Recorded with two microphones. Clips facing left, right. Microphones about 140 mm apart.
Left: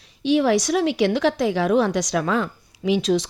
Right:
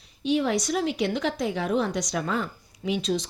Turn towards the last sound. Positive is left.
turn(degrees=80)